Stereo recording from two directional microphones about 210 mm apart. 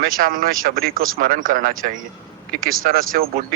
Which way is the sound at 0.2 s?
40° right (ahead or behind).